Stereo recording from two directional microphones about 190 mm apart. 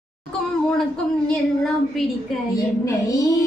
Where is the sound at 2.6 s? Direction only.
15° left (ahead or behind).